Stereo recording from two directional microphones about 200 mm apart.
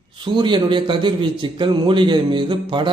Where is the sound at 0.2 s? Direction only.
25° right (ahead or behind).